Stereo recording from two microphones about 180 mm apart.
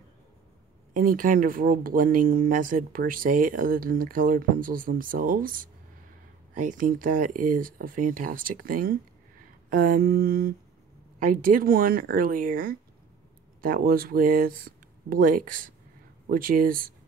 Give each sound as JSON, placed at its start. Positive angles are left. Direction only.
{"t": 0.9, "sound": "speech", "side_deg": -50}
{"t": 9.7, "sound": "mantra", "side_deg": -50}
{"t": 11.1, "sound": "speech", "side_deg": -50}